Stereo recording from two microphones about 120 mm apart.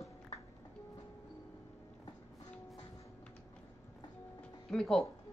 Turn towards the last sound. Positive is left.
turn(degrees=5)  # may be behind; listen again after turning